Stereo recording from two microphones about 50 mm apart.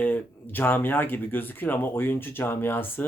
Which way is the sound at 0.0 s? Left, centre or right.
Left.